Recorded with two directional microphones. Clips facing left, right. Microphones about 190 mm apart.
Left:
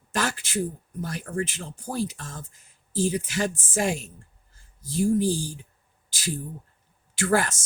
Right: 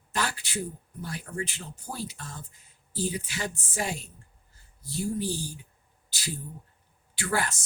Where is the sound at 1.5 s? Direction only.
90° left.